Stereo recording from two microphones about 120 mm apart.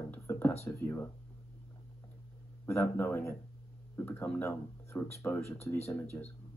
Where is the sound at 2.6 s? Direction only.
20° left (ahead or behind).